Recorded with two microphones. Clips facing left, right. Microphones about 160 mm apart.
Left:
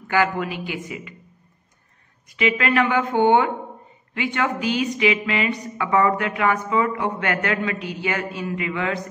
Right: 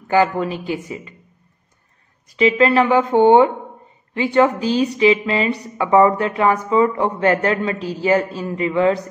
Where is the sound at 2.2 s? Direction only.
35° right (ahead or behind).